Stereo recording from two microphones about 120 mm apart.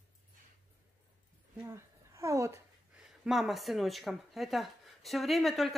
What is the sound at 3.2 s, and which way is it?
Speech, 5° right (ahead or behind).